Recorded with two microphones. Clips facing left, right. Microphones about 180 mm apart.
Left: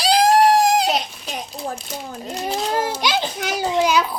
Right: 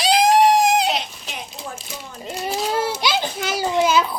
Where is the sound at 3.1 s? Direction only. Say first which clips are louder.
Even; centre (ahead or behind).